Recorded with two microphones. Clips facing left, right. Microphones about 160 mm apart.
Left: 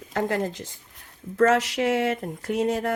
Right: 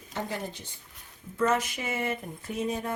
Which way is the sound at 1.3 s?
85° left.